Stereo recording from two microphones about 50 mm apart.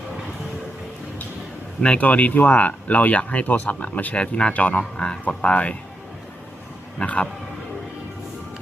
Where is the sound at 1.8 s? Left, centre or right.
Left.